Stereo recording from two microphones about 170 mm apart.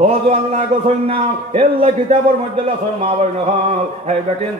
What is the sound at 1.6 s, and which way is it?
Speech, 35° right (ahead or behind).